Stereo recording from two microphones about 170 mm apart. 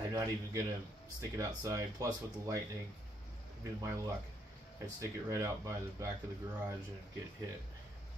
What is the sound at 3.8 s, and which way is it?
Speech, 20° right (ahead or behind).